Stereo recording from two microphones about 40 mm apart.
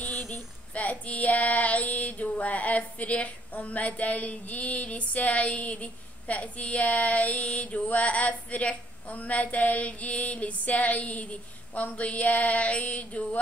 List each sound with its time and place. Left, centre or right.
0.3 s child singing: left
7.5 s a woman's voice: left